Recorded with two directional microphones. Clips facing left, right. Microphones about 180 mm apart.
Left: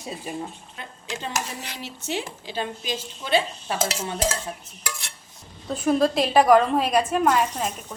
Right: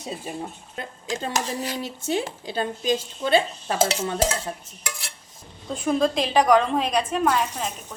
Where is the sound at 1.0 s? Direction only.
35° right (ahead or behind).